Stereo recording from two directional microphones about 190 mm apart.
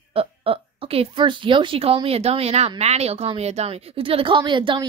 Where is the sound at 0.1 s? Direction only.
30° right (ahead or behind).